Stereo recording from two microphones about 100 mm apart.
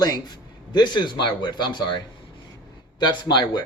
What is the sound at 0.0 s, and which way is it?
Speech, 45° left (ahead or behind).